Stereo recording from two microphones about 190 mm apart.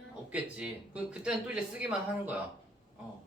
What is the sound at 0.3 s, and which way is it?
Speech, 5° right (ahead or behind).